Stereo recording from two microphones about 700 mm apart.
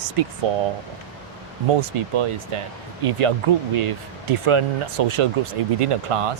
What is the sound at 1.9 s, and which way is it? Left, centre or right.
Speech, right.